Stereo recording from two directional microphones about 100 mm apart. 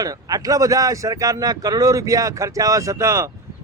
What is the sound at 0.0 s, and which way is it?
Speech, 40° right (ahead or behind).